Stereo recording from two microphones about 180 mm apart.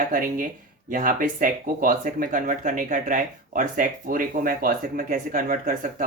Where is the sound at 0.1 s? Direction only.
50° right (ahead or behind).